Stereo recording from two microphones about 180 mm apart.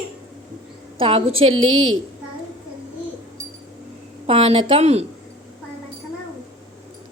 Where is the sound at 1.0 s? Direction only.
30° right (ahead or behind).